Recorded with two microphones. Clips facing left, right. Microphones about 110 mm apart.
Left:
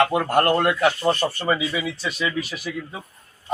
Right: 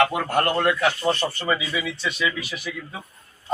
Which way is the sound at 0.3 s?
40° left (ahead or behind).